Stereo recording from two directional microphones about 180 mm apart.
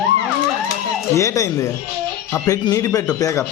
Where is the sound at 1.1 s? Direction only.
15° left (ahead or behind).